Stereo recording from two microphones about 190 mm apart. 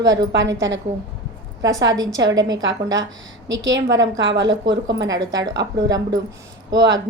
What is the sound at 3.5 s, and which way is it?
A woman's voice, 70° right (ahead or behind).